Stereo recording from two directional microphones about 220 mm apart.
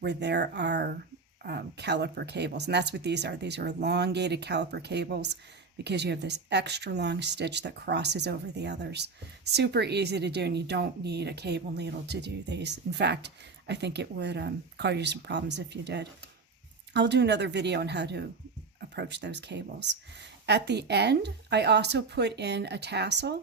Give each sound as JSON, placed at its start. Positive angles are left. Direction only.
{"t": 0.0, "sound": "speech", "side_deg": -50}